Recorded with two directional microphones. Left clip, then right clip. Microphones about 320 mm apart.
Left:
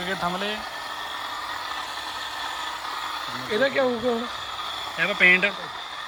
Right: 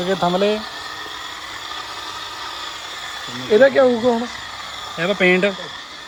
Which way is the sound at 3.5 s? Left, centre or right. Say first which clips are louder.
Right 10 dB; right.